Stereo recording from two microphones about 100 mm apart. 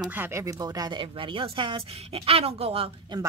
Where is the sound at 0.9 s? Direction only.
55° right (ahead or behind).